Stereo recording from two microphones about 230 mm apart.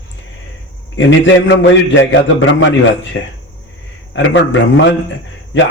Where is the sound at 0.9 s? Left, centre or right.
Left.